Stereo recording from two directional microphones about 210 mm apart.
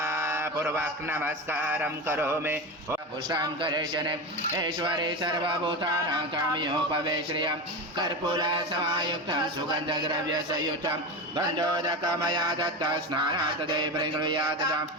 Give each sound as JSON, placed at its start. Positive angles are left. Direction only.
{"t": 0.0, "sound": "mantra", "side_deg": -10}
{"t": 3.2, "sound": "music", "side_deg": -20}